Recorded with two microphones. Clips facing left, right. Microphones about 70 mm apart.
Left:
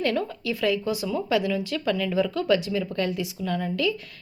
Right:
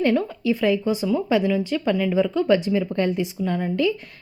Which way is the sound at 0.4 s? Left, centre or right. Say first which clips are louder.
Right 5 dB; right.